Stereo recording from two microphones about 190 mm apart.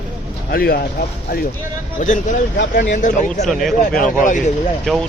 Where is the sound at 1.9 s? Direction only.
40° left (ahead or behind).